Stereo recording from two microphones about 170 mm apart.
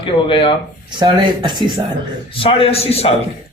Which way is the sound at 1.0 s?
25° right (ahead or behind).